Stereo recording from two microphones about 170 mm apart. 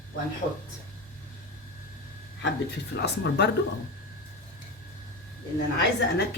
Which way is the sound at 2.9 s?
80° left.